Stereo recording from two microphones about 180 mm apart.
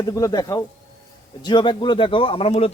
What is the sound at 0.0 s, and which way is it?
A man's voice, 20° left (ahead or behind).